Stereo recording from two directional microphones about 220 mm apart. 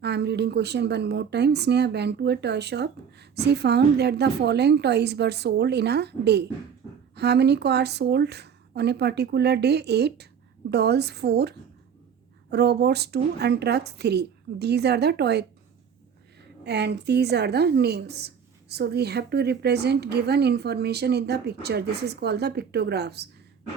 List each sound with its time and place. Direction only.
0.0 s a woman's voice: 50° right (ahead or behind)
16.6 s a woman's voice: 50° right (ahead or behind)